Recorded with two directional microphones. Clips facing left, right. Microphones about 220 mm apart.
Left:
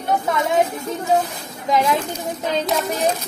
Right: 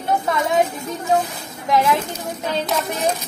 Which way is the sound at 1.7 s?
15° left (ahead or behind).